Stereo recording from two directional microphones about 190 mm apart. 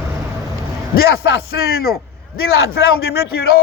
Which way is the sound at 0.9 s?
75° left (ahead or behind).